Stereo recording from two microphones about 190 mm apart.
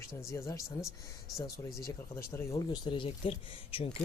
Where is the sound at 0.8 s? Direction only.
Centre (ahead or behind).